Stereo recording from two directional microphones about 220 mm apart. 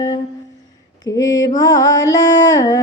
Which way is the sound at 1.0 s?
15° left (ahead or behind).